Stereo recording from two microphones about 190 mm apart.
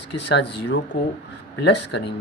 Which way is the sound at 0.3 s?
65° left (ahead or behind).